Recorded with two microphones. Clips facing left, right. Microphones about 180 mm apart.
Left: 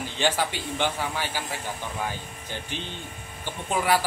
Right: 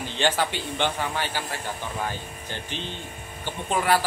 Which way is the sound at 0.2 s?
10° left (ahead or behind).